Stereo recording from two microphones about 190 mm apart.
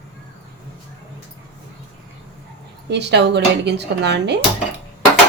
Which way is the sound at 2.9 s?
65° right (ahead or behind).